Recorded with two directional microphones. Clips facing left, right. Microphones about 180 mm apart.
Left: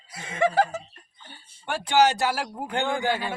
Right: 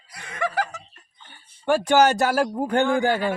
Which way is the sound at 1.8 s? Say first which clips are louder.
Right 1 dB; 45° right (ahead or behind).